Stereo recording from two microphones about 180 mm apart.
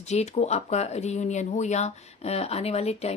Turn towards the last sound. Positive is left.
turn(degrees=35)  # may be behind; listen again after turning